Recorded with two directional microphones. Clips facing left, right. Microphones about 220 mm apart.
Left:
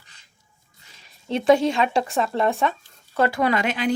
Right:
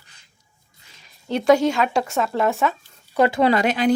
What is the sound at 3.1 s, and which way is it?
Speech, 20° right (ahead or behind).